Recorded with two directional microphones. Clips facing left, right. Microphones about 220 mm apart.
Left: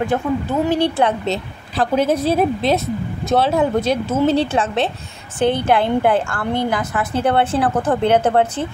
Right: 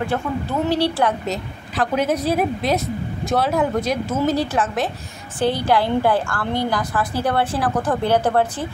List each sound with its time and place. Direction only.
0.0 s a woman's voice: 15° left (ahead or behind)